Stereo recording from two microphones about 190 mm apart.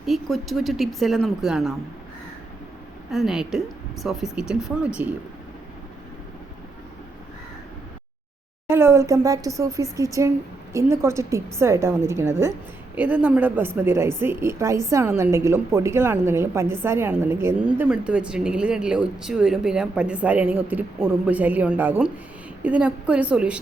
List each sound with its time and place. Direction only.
0.0 s speech: centre (ahead or behind)
3.1 s speech: centre (ahead or behind)
8.6 s a woman's voice: 15° right (ahead or behind)